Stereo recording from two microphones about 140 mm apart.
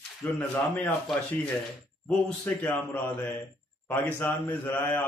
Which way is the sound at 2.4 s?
10° left (ahead or behind).